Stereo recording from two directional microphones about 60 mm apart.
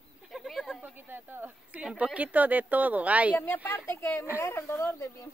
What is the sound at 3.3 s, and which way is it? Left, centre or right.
Speech, left.